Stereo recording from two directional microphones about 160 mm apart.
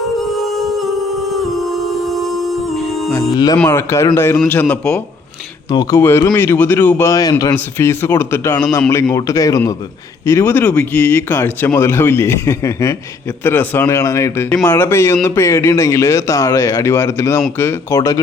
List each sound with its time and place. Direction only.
2.6 s music: centre (ahead or behind)
3.1 s a man's voice: 20° left (ahead or behind)
5.7 s a man's voice: 25° left (ahead or behind)
6.0 s a man's voice: 15° left (ahead or behind)